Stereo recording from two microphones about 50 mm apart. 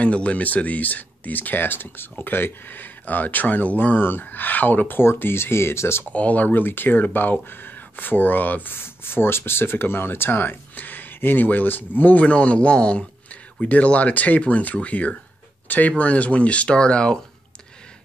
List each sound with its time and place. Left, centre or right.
0.0 s speech: left
6.1 s speech: left
8.7 s speech: left; by 17.2 s centre